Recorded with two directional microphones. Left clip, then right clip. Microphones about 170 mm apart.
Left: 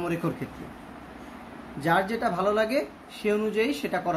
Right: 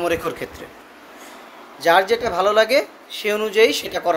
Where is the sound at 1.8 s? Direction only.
55° right (ahead or behind).